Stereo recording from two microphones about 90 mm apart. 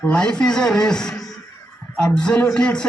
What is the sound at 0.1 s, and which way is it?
A man's voice, 10° left (ahead or behind).